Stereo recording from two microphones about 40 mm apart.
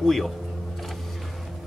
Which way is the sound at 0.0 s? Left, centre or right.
Centre.